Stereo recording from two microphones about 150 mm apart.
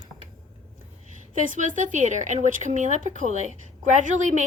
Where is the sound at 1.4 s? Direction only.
55° right (ahead or behind).